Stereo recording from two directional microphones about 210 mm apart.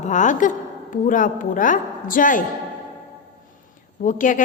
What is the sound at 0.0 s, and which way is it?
A woman's voice, 35° left (ahead or behind).